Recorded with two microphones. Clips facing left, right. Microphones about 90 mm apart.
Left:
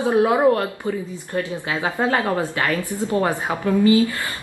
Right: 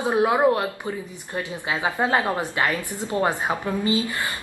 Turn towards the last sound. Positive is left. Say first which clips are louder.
# left 7 dB
turn(degrees=-20)  # may be behind; listen again after turning